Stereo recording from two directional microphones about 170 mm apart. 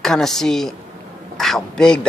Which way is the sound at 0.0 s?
5° left (ahead or behind).